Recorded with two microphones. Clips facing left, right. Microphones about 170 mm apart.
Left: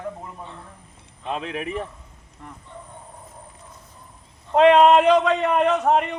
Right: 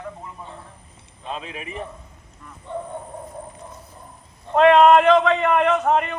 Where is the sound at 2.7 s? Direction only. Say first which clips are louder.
Right 14 dB; 65° right (ahead or behind).